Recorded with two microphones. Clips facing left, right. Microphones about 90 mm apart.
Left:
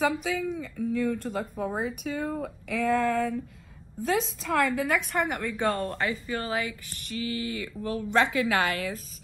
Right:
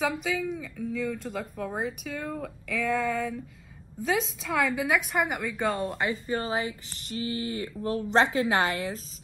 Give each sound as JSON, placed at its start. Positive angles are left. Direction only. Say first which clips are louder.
{"t": 0.0, "sound": "speech", "louder": "left 2 dB", "side_deg": 0}
{"t": 5.9, "sound": "speech", "louder": "even", "side_deg": -15}
{"t": 6.1, "sound": "speech", "louder": "right 1 dB", "side_deg": -35}